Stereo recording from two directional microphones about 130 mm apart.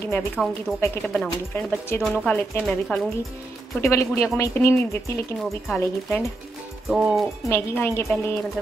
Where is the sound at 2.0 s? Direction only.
10° left (ahead or behind).